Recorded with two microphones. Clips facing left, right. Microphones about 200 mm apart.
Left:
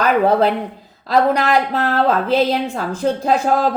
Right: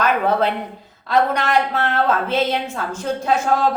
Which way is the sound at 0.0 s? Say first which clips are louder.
Left 4 dB; 35° left (ahead or behind).